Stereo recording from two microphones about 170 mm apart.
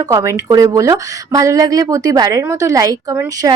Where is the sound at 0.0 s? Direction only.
20° right (ahead or behind).